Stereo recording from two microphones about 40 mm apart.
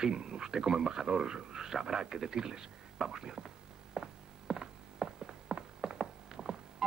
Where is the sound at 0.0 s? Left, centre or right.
Centre.